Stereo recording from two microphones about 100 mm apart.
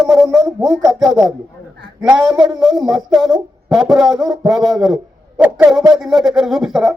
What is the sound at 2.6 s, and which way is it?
A man's voice, 5° right (ahead or behind).